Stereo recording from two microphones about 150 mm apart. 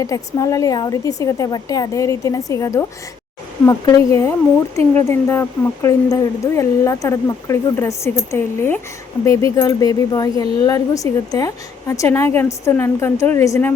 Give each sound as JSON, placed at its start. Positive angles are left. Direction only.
{"t": 0.0, "sound": "speech", "side_deg": 20}